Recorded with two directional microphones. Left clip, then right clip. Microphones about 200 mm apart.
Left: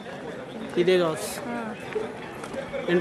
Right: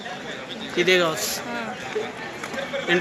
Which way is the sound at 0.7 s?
20° left (ahead or behind).